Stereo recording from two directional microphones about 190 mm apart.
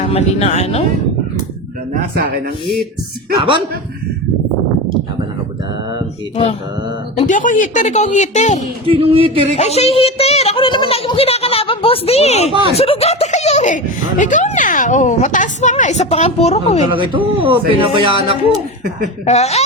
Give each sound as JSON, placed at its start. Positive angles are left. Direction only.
{"t": 0.0, "sound": "speech", "side_deg": 35}
{"t": 3.3, "sound": "speech", "side_deg": -25}
{"t": 7.2, "sound": "speech", "side_deg": 40}
{"t": 8.9, "sound": "speech", "side_deg": -30}
{"t": 9.6, "sound": "speech", "side_deg": 35}
{"t": 12.5, "sound": "speech", "side_deg": -25}
{"t": 12.7, "sound": "speech", "side_deg": 30}
{"t": 16.9, "sound": "speech", "side_deg": -25}
{"t": 19.2, "sound": "speech", "side_deg": 35}